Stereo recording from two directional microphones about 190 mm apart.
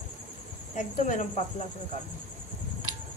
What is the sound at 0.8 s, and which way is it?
Speech, 40° left (ahead or behind).